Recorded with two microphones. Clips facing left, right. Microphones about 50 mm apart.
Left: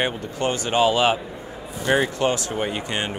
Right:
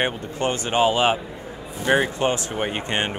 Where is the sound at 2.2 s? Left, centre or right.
Right.